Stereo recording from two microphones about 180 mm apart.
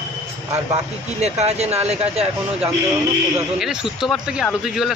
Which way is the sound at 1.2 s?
35° right (ahead or behind).